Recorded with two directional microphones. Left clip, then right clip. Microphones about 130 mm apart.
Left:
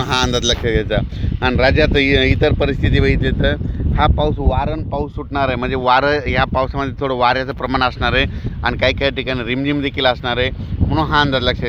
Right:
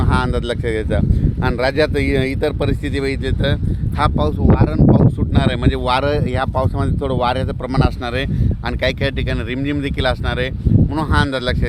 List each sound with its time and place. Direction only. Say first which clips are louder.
0.1 s speech: left 5 dB; 80° left; by 5.0 s 50° left (ahead or behind)
5.3 s speech: left 2 dB; 25° left (ahead or behind)